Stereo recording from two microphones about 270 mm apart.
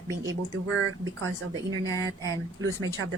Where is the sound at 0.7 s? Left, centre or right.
Right.